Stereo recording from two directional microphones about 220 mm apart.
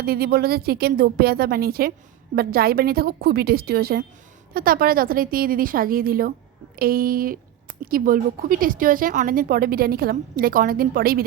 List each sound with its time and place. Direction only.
0.0 s a woman's voice: 45° right (ahead or behind)